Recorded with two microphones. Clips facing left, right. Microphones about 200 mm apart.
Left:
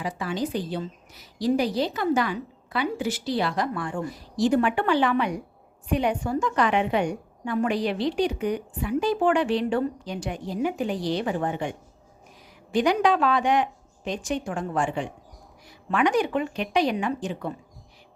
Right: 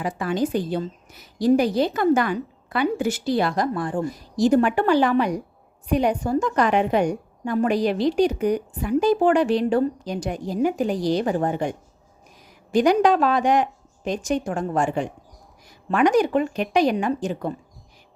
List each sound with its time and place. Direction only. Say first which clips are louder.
0.0 s a woman's voice: right 5 dB; 50° right (ahead or behind)